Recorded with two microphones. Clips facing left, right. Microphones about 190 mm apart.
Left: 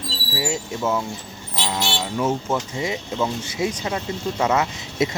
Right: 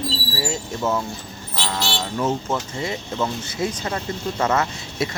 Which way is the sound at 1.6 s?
15° left (ahead or behind).